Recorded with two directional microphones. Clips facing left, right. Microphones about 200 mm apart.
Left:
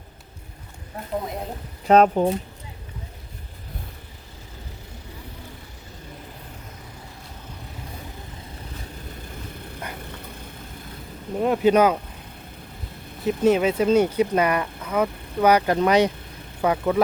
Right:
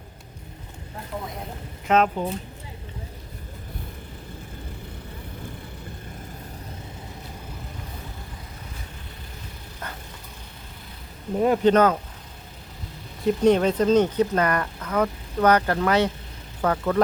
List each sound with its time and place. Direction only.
1.9 s speech: 45° left (ahead or behind)
11.3 s speech: centre (ahead or behind)
11.7 s speech: 10° left (ahead or behind)
13.2 s speech: 5° left (ahead or behind)